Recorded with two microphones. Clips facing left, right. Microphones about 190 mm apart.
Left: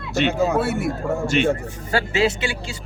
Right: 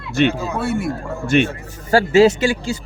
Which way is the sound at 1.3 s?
55° right (ahead or behind).